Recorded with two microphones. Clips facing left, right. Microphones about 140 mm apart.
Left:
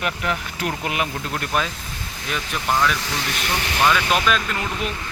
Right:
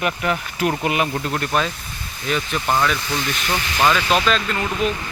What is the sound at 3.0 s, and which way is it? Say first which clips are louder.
Speech: right 3 dB; 90° left.